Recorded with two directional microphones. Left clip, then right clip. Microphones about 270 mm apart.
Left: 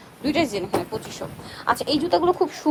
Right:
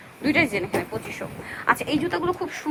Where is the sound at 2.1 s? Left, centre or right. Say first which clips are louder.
Left 6 dB; left.